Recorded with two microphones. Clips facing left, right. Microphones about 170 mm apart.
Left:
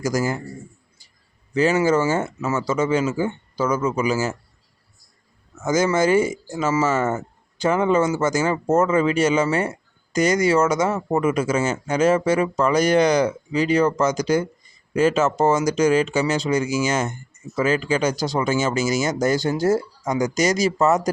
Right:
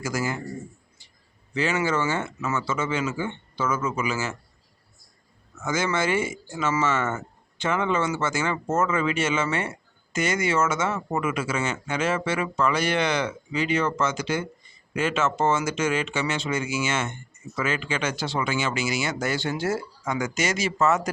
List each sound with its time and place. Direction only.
0.0 s speech: 40° left (ahead or behind)
1.5 s speech: 40° left (ahead or behind)
5.6 s speech: 40° left (ahead or behind)